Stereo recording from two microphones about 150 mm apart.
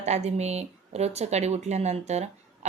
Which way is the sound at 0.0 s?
50° right (ahead or behind).